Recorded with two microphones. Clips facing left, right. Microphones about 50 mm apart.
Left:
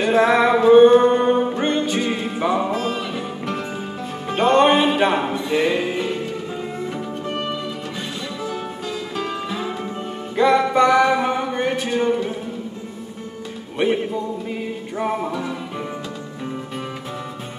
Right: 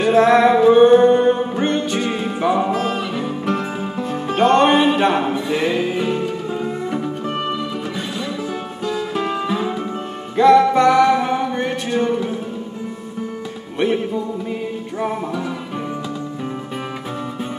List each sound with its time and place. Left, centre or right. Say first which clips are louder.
0.0 s music: right 3 dB; centre
2.7 s music: right 3 dB; right
3.0 s music: right 3 dB; centre
4.4 s music: right 1 dB; centre
6.9 s music: right 4 dB; centre
10.3 s music: right 5 dB; centre
15.0 s music: even; centre